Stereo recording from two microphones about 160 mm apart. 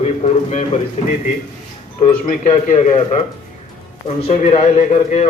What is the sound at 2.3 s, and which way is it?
A man's voice, 45° left (ahead or behind).